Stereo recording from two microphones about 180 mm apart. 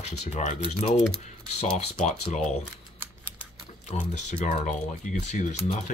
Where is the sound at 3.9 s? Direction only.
40° left (ahead or behind).